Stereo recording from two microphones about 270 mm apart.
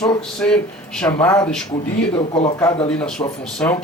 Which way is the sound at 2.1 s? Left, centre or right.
Left.